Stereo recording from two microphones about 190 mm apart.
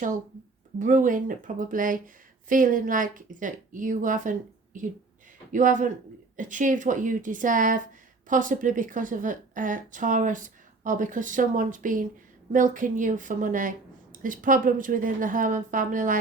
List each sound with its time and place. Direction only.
0.8 s a woman's voice: 40° right (ahead or behind)